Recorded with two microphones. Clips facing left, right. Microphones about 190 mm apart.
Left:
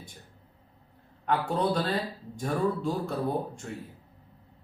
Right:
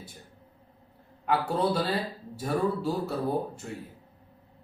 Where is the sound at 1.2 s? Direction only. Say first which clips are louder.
Right 1 dB; 5° right (ahead or behind).